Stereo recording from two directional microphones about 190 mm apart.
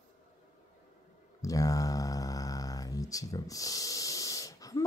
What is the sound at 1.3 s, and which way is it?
Mantra, 20° left (ahead or behind).